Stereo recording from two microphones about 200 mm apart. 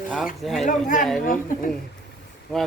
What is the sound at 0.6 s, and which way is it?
Speech, 40° left (ahead or behind).